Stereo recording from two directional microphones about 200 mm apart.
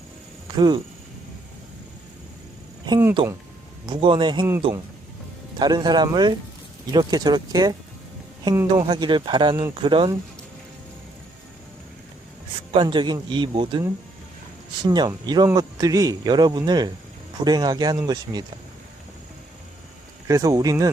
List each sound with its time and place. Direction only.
0.5 s speech: 20° right (ahead or behind)
2.8 s speech: 20° right (ahead or behind)
12.7 s speech: 25° right (ahead or behind)
14.8 s speech: 20° right (ahead or behind)
20.2 s speech: 15° right (ahead or behind)